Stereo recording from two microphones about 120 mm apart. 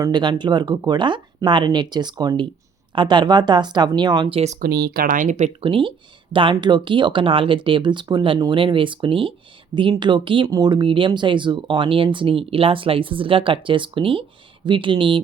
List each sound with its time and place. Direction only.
0.0 s speech: 40° right (ahead or behind)
5.1 s speech: 90° right
5.5 s speech: 45° right (ahead or behind)